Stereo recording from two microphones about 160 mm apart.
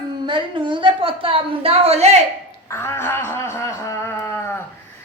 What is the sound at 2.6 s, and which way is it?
Speech, 15° left (ahead or behind).